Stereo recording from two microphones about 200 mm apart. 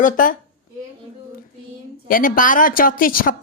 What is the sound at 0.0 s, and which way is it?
Speech, 45° left (ahead or behind).